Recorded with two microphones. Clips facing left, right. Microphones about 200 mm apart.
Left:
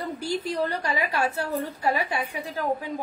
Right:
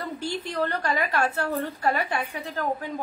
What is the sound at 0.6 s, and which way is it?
A woman's voice, 10° left (ahead or behind).